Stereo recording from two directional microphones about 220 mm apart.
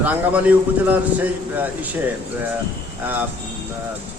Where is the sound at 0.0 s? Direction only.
5° right (ahead or behind).